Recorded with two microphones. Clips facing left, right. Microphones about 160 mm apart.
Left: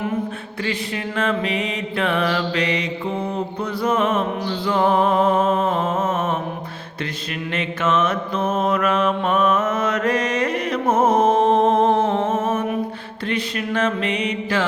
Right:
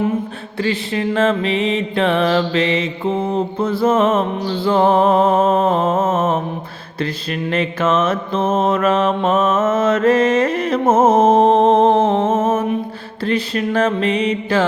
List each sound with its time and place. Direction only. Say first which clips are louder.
0.9 s music: right 7 dB; 30° right (ahead or behind)
7.5 s mantra: right 4 dB; 35° right (ahead or behind)
13.2 s music: right 5 dB; 35° right (ahead or behind)